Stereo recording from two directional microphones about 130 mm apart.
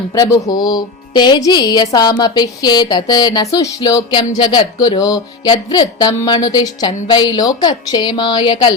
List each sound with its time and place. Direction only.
0.2 s speech: 30° left (ahead or behind)